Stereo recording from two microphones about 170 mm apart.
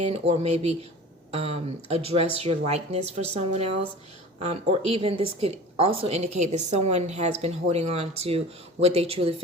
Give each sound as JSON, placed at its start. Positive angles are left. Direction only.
{"t": 0.0, "sound": "a woman's voice", "side_deg": -40}